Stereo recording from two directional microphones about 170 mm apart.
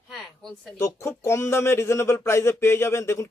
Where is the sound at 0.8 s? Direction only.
15° left (ahead or behind).